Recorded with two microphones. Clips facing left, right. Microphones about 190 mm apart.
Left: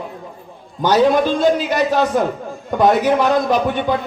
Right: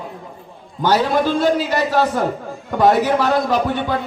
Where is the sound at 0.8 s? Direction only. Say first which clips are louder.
Left 3 dB; 20° left (ahead or behind).